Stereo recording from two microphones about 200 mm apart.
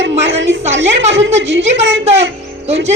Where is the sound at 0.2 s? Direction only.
65° right (ahead or behind).